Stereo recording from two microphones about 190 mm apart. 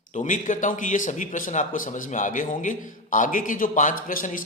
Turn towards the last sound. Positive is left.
turn(degrees=45)  # may be behind; listen again after turning